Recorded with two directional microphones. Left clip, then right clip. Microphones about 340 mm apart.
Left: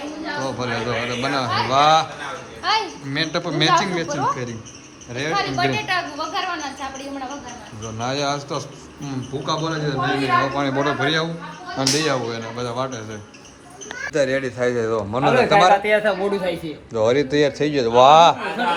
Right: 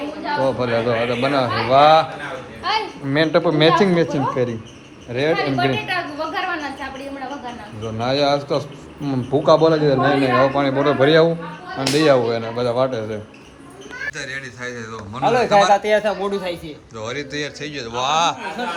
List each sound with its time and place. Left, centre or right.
0.4 s a man's voice: centre
2.6 s a sound: left
3.1 s a man's voice: centre
5.8 s a sound: centre
7.9 s a man's voice: centre
15.7 s speech: right
16.9 s a man's voice: centre